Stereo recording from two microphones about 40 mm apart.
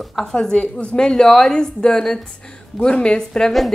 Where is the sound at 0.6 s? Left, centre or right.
Left.